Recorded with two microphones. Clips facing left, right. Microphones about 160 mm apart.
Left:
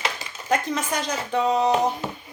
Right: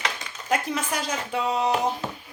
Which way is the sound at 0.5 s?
5° right (ahead or behind).